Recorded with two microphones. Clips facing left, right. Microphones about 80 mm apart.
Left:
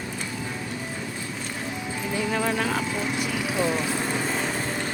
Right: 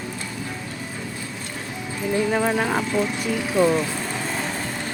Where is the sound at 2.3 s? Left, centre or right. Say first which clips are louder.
Right 4 dB; centre.